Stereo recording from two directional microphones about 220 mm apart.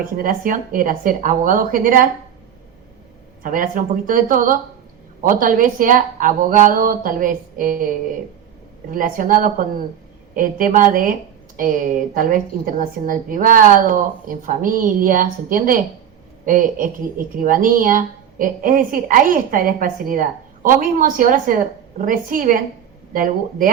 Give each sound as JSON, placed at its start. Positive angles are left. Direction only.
{"t": 0.0, "sound": "a woman's voice", "side_deg": -40}
{"t": 3.4, "sound": "a woman's voice", "side_deg": -40}